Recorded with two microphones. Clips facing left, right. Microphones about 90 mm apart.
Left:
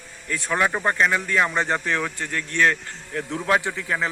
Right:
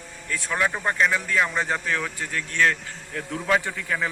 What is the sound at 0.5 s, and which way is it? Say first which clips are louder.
Speech: left 3 dB; 20° left (ahead or behind).